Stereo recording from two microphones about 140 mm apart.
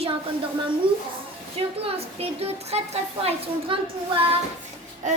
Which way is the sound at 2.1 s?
45° right (ahead or behind).